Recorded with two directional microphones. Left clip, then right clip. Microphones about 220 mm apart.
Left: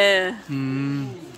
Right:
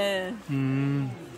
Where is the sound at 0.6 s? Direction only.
15° right (ahead or behind).